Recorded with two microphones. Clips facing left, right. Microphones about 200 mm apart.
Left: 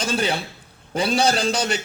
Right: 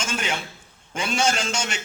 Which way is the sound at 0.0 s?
35° left (ahead or behind).